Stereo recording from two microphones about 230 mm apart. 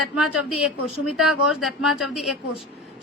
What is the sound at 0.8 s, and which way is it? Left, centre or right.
A woman's voice, centre.